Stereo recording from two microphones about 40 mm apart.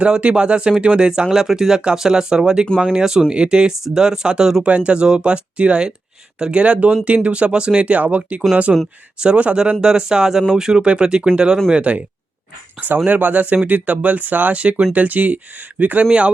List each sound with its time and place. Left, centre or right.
0.0 s speech: right
8.7 s speech: right
11.7 s speech: right
13.1 s speech: right
14.6 s speech: right
16.0 s speech: right